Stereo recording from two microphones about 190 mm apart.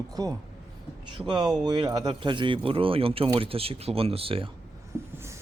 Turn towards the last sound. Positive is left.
turn(degrees=-15)  # may be behind; listen again after turning